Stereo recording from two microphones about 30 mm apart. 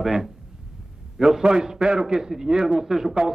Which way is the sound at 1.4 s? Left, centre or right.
Right.